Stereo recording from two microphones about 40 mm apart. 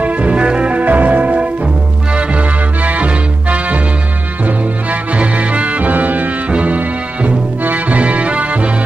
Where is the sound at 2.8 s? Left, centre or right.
Right.